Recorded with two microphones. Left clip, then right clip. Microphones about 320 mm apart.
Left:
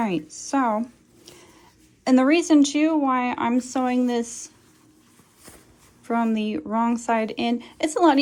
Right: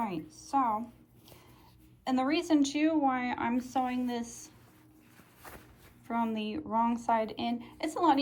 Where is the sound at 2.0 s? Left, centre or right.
Centre.